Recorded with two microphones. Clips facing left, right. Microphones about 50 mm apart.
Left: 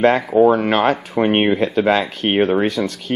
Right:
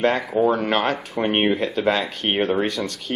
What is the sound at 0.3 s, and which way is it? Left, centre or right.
Speech, centre.